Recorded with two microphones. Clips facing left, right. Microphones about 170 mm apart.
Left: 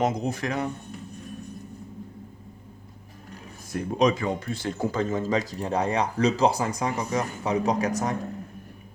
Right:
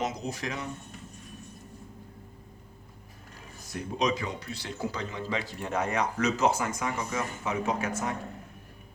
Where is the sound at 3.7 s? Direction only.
50° left (ahead or behind).